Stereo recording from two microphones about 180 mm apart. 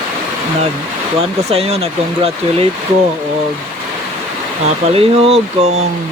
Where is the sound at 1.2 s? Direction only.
35° right (ahead or behind).